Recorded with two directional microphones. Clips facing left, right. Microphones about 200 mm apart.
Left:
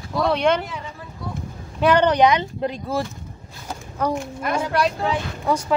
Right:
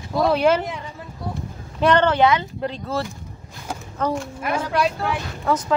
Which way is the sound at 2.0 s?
15° left (ahead or behind).